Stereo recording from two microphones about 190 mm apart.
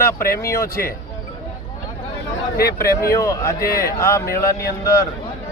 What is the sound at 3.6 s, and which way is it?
Speech, 50° left (ahead or behind).